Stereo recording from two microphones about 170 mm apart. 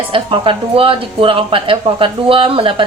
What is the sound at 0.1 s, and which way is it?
A woman's voice, 30° right (ahead or behind).